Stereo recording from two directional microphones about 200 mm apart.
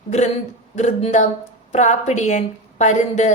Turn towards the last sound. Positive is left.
turn(degrees=35)  # may be behind; listen again after turning